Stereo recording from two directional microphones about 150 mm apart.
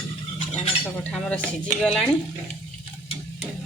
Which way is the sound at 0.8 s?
5° left (ahead or behind).